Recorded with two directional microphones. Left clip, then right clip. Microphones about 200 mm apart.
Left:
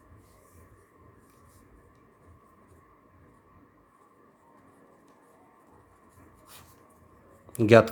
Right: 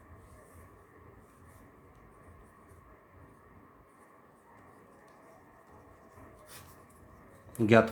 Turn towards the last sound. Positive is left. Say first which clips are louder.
# left 6 dB
turn(degrees=45)  # may be behind; listen again after turning